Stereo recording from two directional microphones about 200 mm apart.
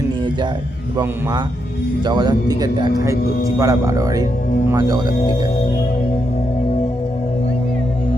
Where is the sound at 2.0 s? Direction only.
20° right (ahead or behind).